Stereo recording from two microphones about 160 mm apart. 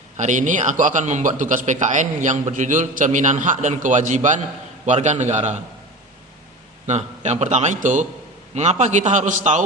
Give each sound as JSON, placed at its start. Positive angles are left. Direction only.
{"t": 0.2, "sound": "speech", "side_deg": -50}
{"t": 6.8, "sound": "speech", "side_deg": -45}